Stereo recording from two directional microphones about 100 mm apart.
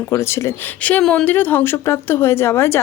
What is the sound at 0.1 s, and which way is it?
Speech, 25° left (ahead or behind).